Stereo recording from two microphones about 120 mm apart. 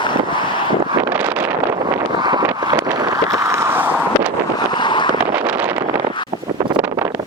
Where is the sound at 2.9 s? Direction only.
30° right (ahead or behind); by 4.3 s 15° right (ahead or behind).